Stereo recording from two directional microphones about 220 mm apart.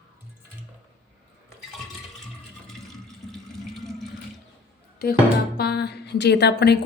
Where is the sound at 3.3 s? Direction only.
Centre (ahead or behind).